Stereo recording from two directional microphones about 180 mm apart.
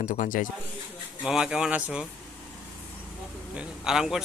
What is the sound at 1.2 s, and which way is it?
Speech, 5° right (ahead or behind).